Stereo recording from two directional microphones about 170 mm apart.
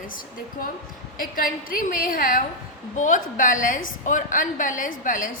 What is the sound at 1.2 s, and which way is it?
A woman's voice, 55° left (ahead or behind).